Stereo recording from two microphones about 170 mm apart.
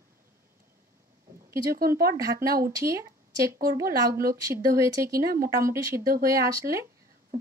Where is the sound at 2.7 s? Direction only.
20° right (ahead or behind).